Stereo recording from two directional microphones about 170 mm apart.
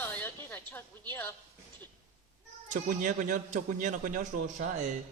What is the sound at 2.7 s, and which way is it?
A man's voice, 50° right (ahead or behind).